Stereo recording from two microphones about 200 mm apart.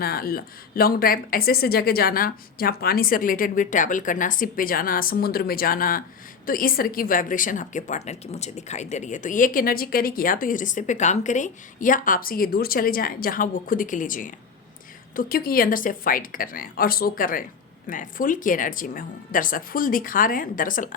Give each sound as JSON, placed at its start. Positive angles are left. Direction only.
{"t": 0.0, "sound": "a woman's voice", "side_deg": 50}